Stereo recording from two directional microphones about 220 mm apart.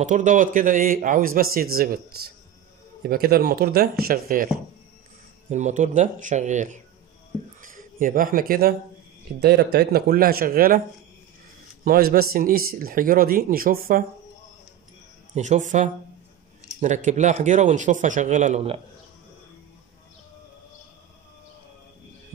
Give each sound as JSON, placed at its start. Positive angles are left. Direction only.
{"t": 0.0, "sound": "speech", "side_deg": -35}
{"t": 5.5, "sound": "speech", "side_deg": -35}
{"t": 11.8, "sound": "speech", "side_deg": -40}
{"t": 15.3, "sound": "speech", "side_deg": -35}